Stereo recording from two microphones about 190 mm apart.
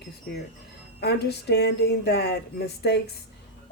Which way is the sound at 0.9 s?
60° left (ahead or behind).